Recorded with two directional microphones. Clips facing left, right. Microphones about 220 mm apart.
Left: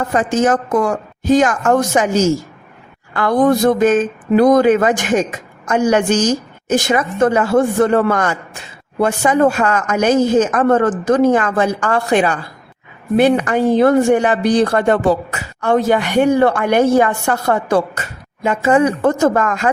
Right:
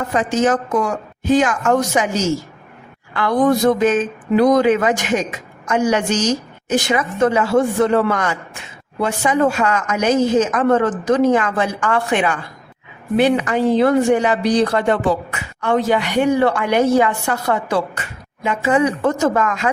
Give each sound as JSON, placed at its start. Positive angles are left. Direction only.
{"t": 0.1, "sound": "speech", "side_deg": 50}
{"t": 1.2, "sound": "speech", "side_deg": 40}
{"t": 3.1, "sound": "speech", "side_deg": 50}